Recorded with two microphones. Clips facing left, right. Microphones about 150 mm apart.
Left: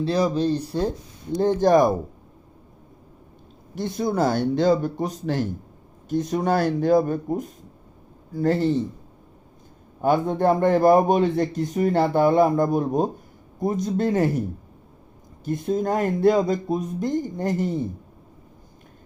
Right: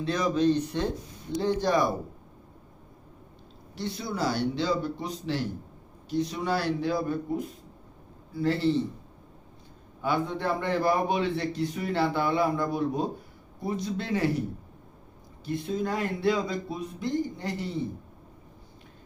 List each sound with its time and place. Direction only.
0.0 s speech: 35° left (ahead or behind)
1.4 s a man's voice: 45° left (ahead or behind)
3.8 s a man's voice: 45° left (ahead or behind)
10.0 s a man's voice: 45° left (ahead or behind)
15.4 s a man's voice: 45° left (ahead or behind)